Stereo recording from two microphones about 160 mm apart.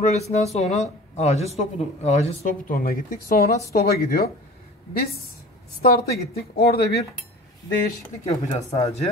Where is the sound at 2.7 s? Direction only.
60° left (ahead or behind).